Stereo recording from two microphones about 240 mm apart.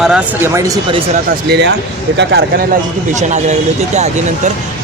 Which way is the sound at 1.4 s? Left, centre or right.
Right.